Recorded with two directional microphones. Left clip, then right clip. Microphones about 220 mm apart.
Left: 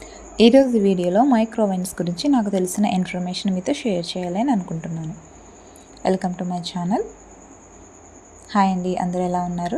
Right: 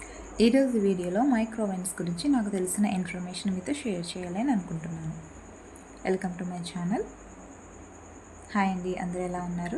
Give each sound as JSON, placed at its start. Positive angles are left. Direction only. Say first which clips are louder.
{"t": 0.3, "sound": "a woman's voice", "louder": "left 10 dB", "side_deg": 30}
{"t": 6.0, "sound": "a woman's voice", "louder": "left 8 dB", "side_deg": 30}
{"t": 8.4, "sound": "a woman's voice", "louder": "left 9 dB", "side_deg": 30}